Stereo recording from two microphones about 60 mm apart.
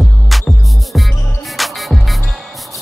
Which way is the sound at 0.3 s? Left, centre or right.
Centre.